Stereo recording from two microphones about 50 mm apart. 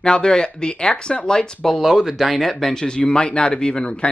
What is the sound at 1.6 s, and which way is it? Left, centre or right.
Speech, centre.